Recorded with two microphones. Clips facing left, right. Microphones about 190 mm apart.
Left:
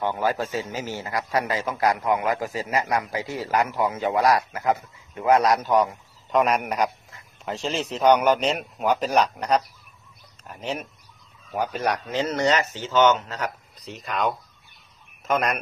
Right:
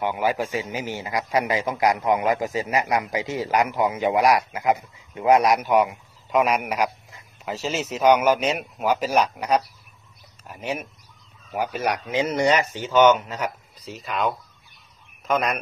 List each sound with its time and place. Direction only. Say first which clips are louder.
0.0 s a man's voice: right 1 dB; 10° right (ahead or behind)
13.7 s a man's voice: even; centre (ahead or behind)